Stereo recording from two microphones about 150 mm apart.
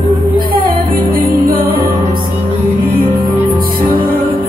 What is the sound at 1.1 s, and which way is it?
Music, 80° right.